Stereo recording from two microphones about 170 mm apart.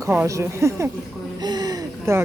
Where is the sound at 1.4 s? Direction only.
25° right (ahead or behind).